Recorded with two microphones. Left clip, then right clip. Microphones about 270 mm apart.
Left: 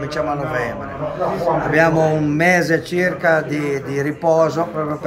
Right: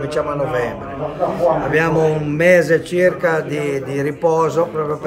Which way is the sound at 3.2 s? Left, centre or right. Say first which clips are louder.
Left 2 dB; centre.